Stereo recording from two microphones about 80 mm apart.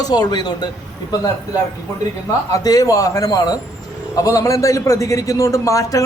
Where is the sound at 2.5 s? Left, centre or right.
Left.